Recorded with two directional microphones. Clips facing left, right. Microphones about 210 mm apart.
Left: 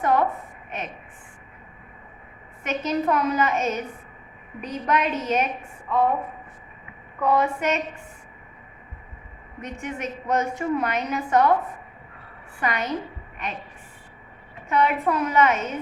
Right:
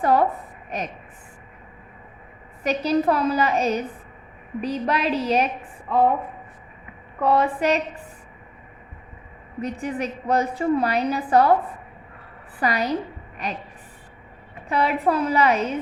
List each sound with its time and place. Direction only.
0.0 s a woman's voice: 35° right (ahead or behind)
2.6 s a woman's voice: 35° right (ahead or behind)
7.2 s a woman's voice: 30° right (ahead or behind)
9.6 s a woman's voice: 35° right (ahead or behind)
12.5 s a woman's voice: 35° right (ahead or behind)
14.7 s a woman's voice: 35° right (ahead or behind)